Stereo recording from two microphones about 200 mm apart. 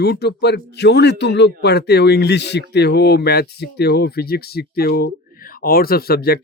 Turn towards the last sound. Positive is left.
turn(degrees=50)  # may be behind; listen again after turning